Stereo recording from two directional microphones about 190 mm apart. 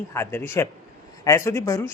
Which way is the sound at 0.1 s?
10° left (ahead or behind).